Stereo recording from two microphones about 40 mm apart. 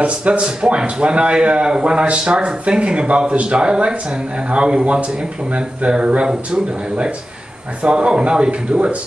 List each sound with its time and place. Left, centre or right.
0.0 s a man's voice: right